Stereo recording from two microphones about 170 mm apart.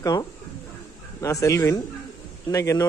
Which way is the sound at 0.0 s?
20° left (ahead or behind).